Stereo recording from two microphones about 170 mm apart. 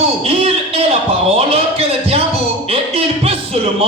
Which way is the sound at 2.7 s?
35° right (ahead or behind).